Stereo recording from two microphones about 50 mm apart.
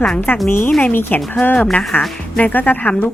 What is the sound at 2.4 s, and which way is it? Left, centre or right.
Speech, left.